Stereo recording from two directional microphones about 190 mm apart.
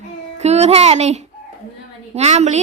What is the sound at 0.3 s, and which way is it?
A child's voice, 35° right (ahead or behind).